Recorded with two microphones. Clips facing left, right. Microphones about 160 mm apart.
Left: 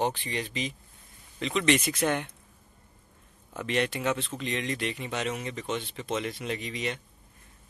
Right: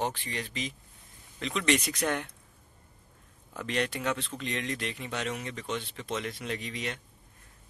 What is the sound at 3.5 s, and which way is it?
Speech, 5° left (ahead or behind).